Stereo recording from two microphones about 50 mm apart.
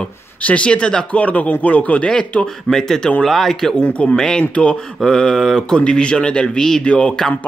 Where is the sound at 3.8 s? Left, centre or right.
Left.